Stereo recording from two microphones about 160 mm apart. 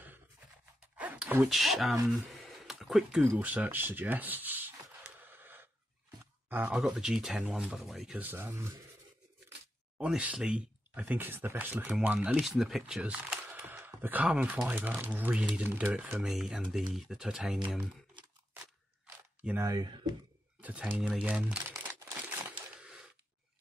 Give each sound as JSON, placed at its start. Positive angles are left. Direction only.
{"t": 0.9, "sound": "speech", "side_deg": -10}
{"t": 2.0, "sound": "a sound", "side_deg": 0}
{"t": 3.3, "sound": "rub", "side_deg": -10}
{"t": 6.5, "sound": "speech", "side_deg": -5}
{"t": 9.9, "sound": "speech", "side_deg": -5}
{"t": 19.4, "sound": "speech", "side_deg": -15}
{"t": 20.6, "sound": "speech", "side_deg": -10}
{"t": 22.0, "sound": "crumpling", "side_deg": -25}
{"t": 22.8, "sound": "a sound", "side_deg": -5}